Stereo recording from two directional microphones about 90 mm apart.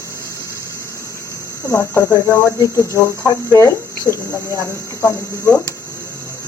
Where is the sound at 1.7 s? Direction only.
30° left (ahead or behind).